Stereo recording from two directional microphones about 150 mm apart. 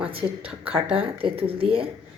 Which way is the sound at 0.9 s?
40° right (ahead or behind).